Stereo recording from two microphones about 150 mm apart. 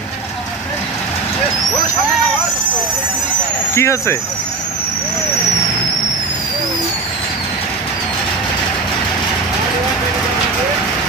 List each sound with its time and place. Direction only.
3.7 s speech: 20° left (ahead or behind)